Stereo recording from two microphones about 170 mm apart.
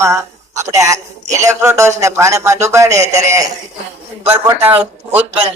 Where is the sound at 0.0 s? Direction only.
15° right (ahead or behind).